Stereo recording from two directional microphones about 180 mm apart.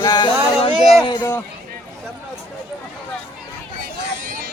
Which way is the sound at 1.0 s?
20° left (ahead or behind).